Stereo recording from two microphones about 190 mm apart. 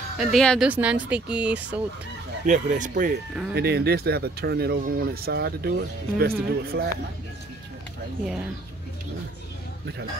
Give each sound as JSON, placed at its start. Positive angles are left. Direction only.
{"t": 0.2, "sound": "speech", "side_deg": 0}
{"t": 2.4, "sound": "speech", "side_deg": -40}
{"t": 3.5, "sound": "speech", "side_deg": -55}